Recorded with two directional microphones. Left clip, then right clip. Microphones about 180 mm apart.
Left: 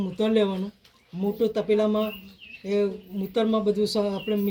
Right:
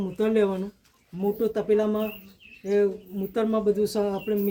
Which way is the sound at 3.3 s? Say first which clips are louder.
Even; 35° right (ahead or behind).